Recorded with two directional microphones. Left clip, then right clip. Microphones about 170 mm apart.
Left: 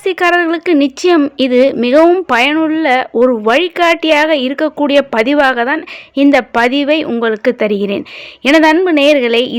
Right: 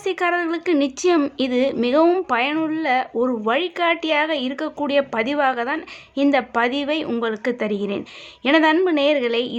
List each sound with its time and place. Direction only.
0.0 s a woman's voice: 30° left (ahead or behind)